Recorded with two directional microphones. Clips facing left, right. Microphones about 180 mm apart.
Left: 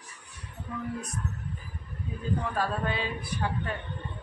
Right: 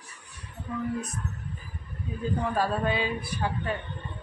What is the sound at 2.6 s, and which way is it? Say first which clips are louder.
Speech: right 6 dB; 10° right (ahead or behind).